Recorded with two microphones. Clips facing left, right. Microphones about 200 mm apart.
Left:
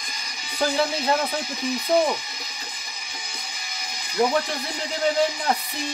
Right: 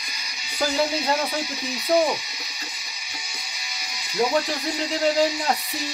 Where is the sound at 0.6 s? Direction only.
55° left (ahead or behind).